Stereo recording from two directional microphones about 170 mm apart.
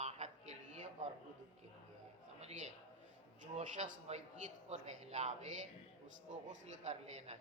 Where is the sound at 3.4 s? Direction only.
50° right (ahead or behind).